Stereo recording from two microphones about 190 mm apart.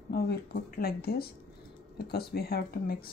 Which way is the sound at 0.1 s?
55° left (ahead or behind).